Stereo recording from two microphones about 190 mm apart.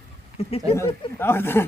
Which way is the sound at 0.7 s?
15° left (ahead or behind).